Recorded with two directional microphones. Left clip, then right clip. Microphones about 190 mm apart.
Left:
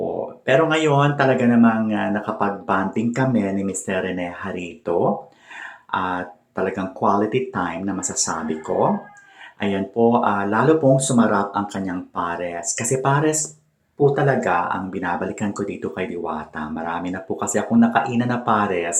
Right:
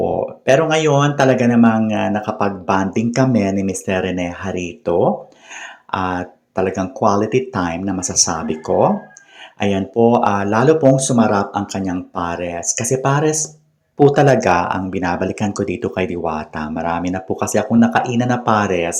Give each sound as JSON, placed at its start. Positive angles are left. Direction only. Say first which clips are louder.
{"t": 0.4, "sound": "speech", "louder": "right 3 dB", "side_deg": -25}
{"t": 14.0, "sound": "speech", "louder": "right 6 dB", "side_deg": -35}